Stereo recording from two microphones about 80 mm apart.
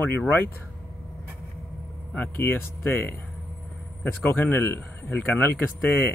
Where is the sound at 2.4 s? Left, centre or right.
Left.